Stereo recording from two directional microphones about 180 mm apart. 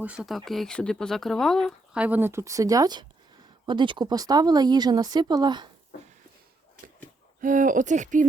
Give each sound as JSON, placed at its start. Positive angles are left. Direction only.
{"t": 0.0, "sound": "speech", "side_deg": -5}
{"t": 7.4, "sound": "speech", "side_deg": -45}